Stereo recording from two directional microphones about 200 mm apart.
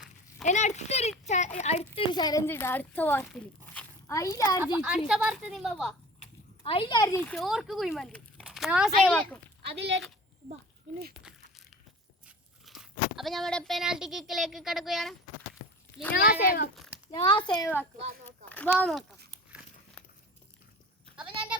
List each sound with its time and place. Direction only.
0.4 s speech: 35° left (ahead or behind); by 4.4 s 15° left (ahead or behind)
4.6 s speech: 10° right (ahead or behind)
6.1 s a sound: 30° left (ahead or behind)
7.3 s speech: centre (ahead or behind)
9.6 s speech: 60° right (ahead or behind)
11.2 s a sound: 5° right (ahead or behind)
12.6 s speech: centre (ahead or behind)
16.1 s a child's voice: 50° left (ahead or behind)
17.2 s a child's voice: 25° left (ahead or behind)
17.6 s speech: 10° left (ahead or behind)